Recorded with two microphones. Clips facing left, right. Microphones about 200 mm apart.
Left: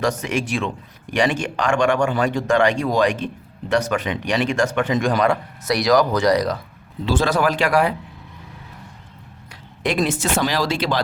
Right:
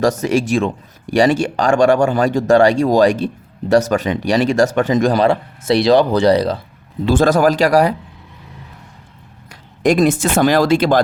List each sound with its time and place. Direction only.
0.0 s speech: 40° right (ahead or behind)
7.0 s speech: 50° right (ahead or behind)
9.8 s speech: 45° right (ahead or behind)